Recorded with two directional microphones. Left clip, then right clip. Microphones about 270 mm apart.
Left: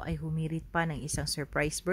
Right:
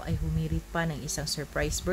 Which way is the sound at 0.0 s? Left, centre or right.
Left.